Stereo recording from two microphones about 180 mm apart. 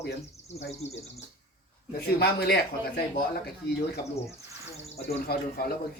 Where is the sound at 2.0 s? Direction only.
65° left (ahead or behind).